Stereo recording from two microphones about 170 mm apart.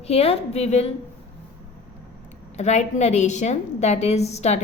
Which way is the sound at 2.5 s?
40° left (ahead or behind).